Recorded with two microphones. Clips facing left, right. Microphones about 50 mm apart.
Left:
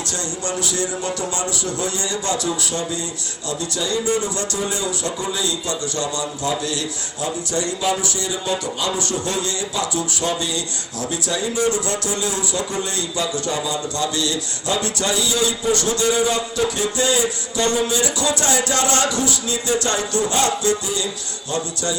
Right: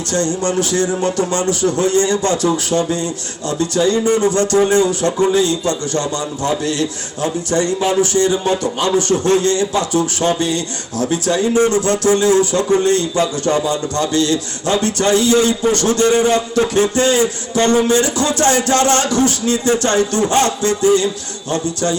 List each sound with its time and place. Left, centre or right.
0.1 s a man's voice: right